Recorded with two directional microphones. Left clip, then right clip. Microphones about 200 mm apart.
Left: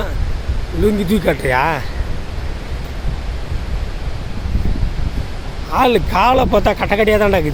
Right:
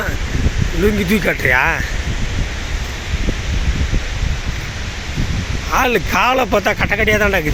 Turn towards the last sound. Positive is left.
turn(degrees=5)  # may be behind; listen again after turning